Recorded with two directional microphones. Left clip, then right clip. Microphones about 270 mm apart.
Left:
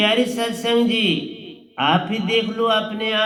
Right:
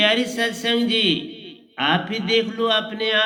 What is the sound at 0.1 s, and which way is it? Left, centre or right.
A man's voice, right.